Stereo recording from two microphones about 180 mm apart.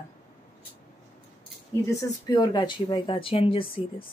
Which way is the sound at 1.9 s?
20° left (ahead or behind).